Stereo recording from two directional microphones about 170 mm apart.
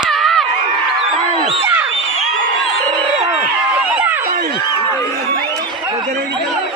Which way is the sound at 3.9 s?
10° right (ahead or behind).